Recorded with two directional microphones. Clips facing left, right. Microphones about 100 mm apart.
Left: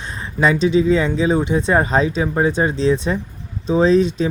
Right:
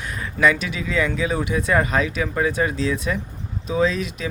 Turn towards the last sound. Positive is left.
turn(degrees=30)  # may be behind; listen again after turning